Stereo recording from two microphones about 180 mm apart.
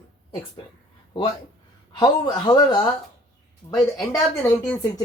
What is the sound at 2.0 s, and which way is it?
A man's voice, 20° left (ahead or behind).